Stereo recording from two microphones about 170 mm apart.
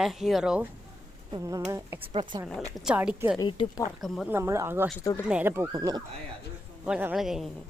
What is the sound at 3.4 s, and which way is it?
Speech, 30° left (ahead or behind).